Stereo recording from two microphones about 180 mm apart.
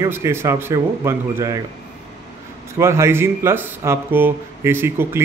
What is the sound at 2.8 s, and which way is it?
Speech, 15° right (ahead or behind).